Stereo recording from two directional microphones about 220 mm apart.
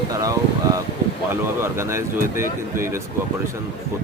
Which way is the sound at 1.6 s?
10° right (ahead or behind).